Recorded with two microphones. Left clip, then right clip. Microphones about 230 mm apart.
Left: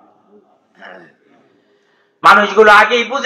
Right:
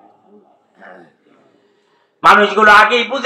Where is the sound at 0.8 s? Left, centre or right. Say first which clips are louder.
Left 3 dB; left.